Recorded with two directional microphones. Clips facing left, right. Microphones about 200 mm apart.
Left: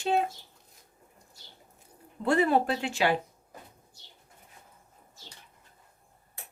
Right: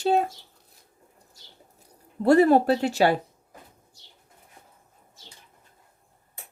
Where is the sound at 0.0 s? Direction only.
40° right (ahead or behind).